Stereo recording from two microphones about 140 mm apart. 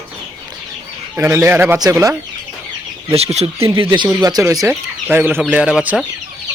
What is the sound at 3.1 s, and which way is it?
Speech, 50° right (ahead or behind).